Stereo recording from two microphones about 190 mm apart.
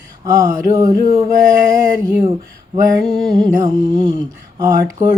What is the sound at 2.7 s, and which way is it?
Mantra, 25° right (ahead or behind).